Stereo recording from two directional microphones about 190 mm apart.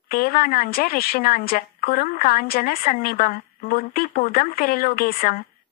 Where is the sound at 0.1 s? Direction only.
50° left (ahead or behind).